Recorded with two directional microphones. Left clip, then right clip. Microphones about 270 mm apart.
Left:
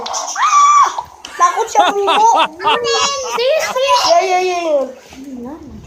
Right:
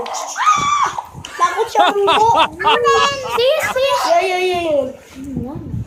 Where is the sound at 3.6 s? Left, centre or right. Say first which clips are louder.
Left 3 dB; centre.